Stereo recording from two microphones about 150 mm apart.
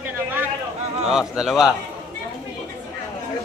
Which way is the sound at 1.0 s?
5° right (ahead or behind).